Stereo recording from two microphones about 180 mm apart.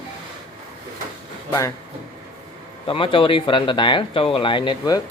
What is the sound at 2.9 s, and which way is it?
Speech, 30° left (ahead or behind).